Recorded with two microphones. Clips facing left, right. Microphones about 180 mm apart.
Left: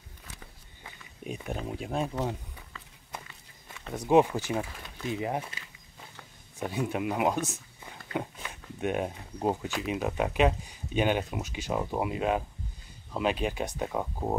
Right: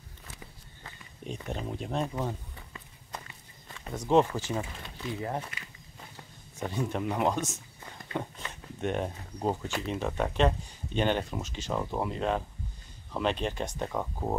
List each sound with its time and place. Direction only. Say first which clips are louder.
0.8 s walk: left 1 dB; 10° left (ahead or behind)
1.7 s speech: even; 5° left (ahead or behind)
3.6 s speech: left 1 dB; 10° left (ahead or behind)
6.6 s speech: left 1 dB; 10° left (ahead or behind)
7.8 s a sound: left 1 dB; 10° left (ahead or behind)
9.7 s speech: left 1 dB; 5° left (ahead or behind)